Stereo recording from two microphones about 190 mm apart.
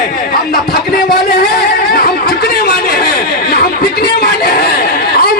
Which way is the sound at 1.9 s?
50° left (ahead or behind).